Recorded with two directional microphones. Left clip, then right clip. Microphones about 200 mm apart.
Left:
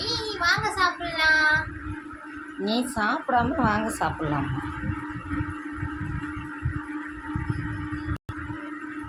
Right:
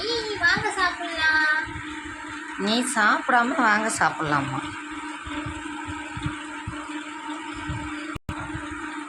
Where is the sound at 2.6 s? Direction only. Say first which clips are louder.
Right 4 dB; 5° right (ahead or behind).